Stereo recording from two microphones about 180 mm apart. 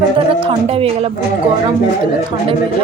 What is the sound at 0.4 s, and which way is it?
Speech, 30° right (ahead or behind).